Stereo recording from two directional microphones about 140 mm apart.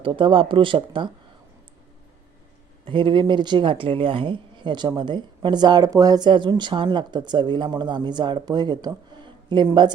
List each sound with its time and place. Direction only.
0.0 s speech: 35° right (ahead or behind)
2.8 s speech: 35° right (ahead or behind)